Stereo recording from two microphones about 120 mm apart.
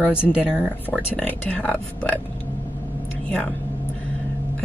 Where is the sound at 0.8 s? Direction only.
10° left (ahead or behind).